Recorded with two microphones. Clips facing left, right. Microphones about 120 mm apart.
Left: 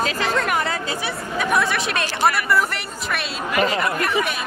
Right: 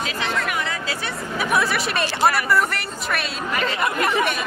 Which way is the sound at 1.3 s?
5° right (ahead or behind).